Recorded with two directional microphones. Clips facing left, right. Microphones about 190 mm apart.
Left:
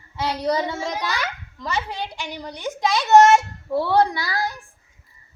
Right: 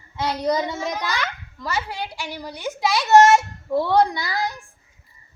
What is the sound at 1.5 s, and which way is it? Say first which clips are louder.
A child's voice: even; 5° right (ahead or behind).